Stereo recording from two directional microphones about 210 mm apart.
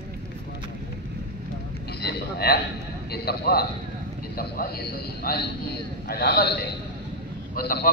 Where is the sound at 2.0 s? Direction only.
50° left (ahead or behind).